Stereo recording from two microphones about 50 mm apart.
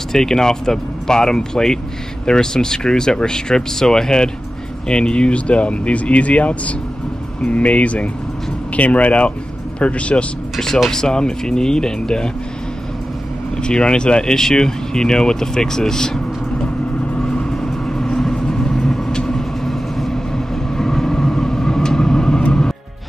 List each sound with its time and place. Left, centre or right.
0.1 s speech: centre
10.6 s speech: centre
13.6 s speech: centre
17.1 s vehicle: centre